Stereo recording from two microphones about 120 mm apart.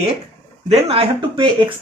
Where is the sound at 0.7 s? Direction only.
55° right (ahead or behind).